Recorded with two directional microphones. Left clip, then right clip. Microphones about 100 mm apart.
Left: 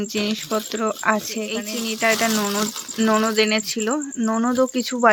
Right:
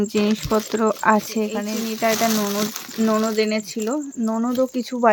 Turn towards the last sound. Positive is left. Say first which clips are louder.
# left 1 dB
turn(degrees=-15)  # may be behind; listen again after turning